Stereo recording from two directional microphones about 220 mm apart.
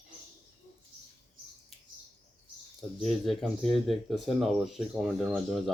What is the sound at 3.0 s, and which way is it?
Speech, centre (ahead or behind).